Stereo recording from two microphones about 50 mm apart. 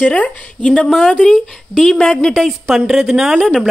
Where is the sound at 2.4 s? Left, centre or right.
Centre.